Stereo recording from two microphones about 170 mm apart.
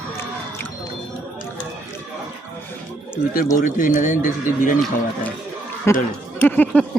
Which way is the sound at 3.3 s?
50° left (ahead or behind).